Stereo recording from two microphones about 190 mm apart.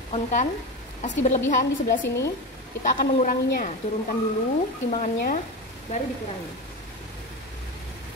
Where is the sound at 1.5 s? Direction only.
45° left (ahead or behind).